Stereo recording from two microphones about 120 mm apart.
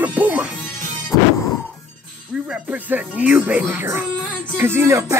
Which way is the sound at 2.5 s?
15° right (ahead or behind).